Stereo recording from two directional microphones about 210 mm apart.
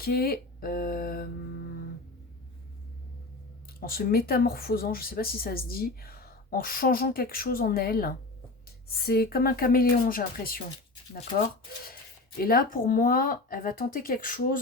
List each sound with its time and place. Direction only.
0.0 s speech: 45° left (ahead or behind)
3.8 s speech: 45° left (ahead or behind)
12.4 s speech: 45° left (ahead or behind)